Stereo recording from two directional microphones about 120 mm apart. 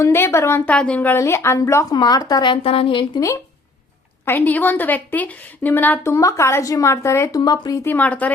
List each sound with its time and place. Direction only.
0.0 s a woman's voice: 20° left (ahead or behind)
0.6 s a woman's voice: 10° left (ahead or behind)
1.1 s a woman's voice: 20° left (ahead or behind); by 3.1 s 45° left (ahead or behind)
4.3 s a woman's voice: 15° left (ahead or behind); by 7.8 s 35° left (ahead or behind)
7.9 s a woman's voice: 15° left (ahead or behind)